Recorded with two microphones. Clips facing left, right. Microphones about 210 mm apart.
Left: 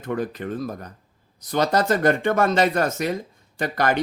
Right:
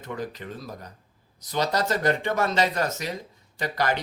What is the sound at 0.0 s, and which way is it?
Speech, 55° left (ahead or behind).